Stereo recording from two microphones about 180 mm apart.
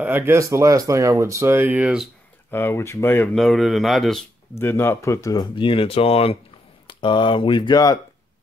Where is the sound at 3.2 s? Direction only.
Centre (ahead or behind).